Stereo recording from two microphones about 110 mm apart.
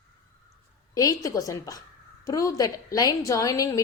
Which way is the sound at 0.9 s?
35° left (ahead or behind).